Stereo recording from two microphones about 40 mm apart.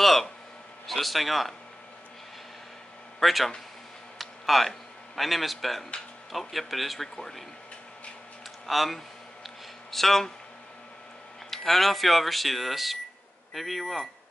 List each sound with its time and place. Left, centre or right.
0.0 s a sound: centre
0.8 s speech: centre
3.2 s a man's voice: centre
8.6 s speech: centre
11.5 s speech: centre